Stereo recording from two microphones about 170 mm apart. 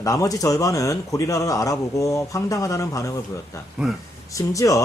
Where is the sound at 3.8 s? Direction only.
5° right (ahead or behind).